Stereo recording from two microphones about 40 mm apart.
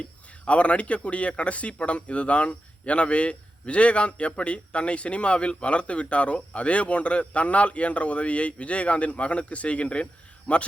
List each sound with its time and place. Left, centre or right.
0.0 s speech: left